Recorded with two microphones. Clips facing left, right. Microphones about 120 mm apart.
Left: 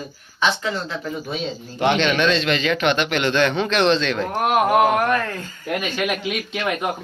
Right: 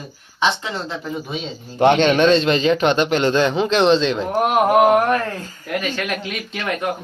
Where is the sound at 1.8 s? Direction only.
45° right (ahead or behind); by 4.2 s 25° right (ahead or behind).